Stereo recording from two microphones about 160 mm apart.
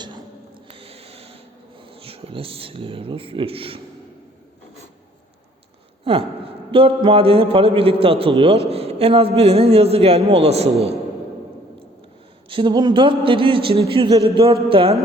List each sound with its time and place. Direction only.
0.7 s a sound: 35° right (ahead or behind)
1.8 s speech: 35° right (ahead or behind)
6.1 s a man's voice: 35° right (ahead or behind)
12.5 s a man's voice: 30° right (ahead or behind)